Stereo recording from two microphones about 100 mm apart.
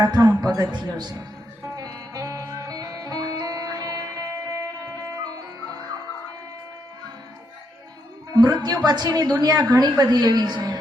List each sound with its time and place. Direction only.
0.0 s a man's voice: 40° right (ahead or behind)
1.6 s music: 35° right (ahead or behind)
8.3 s a woman's voice: 40° right (ahead or behind)